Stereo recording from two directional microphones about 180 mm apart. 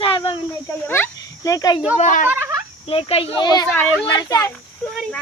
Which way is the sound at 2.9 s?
30° left (ahead or behind).